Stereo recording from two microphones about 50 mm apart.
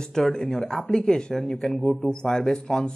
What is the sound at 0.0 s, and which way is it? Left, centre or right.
Speech, centre.